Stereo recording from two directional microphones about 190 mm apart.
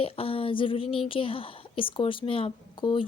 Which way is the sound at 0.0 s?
30° left (ahead or behind).